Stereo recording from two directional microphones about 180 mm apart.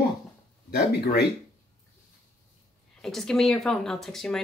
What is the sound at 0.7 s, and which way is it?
Speech, 65° left (ahead or behind).